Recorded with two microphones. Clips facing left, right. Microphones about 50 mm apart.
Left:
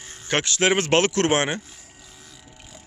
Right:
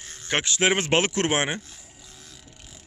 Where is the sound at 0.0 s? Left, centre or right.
Centre.